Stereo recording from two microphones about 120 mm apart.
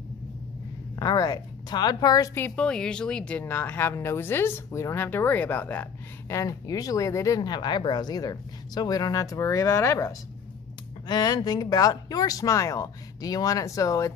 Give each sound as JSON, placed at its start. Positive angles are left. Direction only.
{"t": 0.9, "sound": "speech", "side_deg": 30}
{"t": 2.3, "sound": "speech", "side_deg": 15}